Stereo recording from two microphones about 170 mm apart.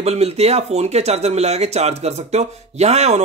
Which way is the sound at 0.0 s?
40° right (ahead or behind).